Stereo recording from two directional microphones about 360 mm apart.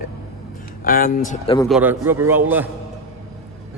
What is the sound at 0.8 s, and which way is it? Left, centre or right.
Speech, left.